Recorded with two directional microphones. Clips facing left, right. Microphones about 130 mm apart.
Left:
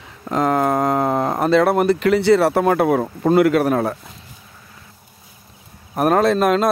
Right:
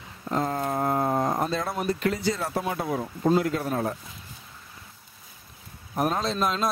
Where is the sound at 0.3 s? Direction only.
90° left.